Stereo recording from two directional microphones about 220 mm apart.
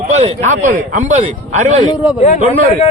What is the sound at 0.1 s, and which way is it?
Speech, 30° right (ahead or behind).